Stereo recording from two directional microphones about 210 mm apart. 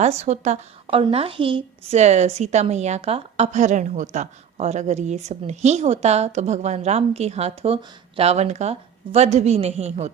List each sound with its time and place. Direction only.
0.0 s a woman's voice: 30° right (ahead or behind)